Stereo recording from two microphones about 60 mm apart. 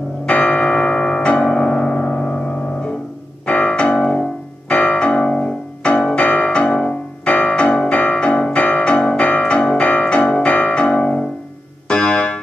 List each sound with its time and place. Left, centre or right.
0.3 s church bell: left
3.4 s piano: left
11.9 s keyboard: centre